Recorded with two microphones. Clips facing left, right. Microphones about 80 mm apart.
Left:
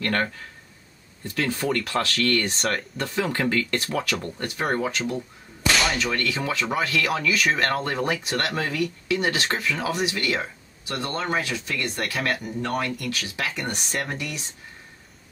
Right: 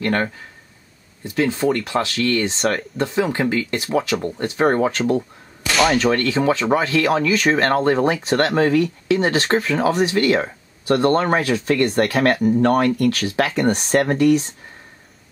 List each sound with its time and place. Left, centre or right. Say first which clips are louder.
0.0 s speech: right 4 dB; right
4.7 s speech: right 8 dB; right